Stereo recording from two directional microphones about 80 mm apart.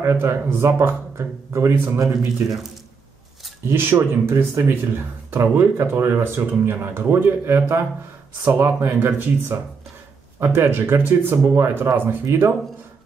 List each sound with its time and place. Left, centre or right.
0.0 s speech: right
3.7 s speech: right